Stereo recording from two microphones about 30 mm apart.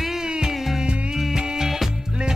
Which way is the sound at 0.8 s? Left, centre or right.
Right.